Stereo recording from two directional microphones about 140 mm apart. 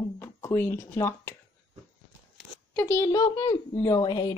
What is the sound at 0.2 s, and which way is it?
Speech, 20° left (ahead or behind).